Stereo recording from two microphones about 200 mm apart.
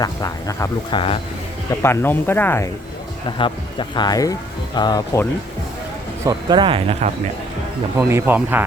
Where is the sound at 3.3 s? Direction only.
25° left (ahead or behind).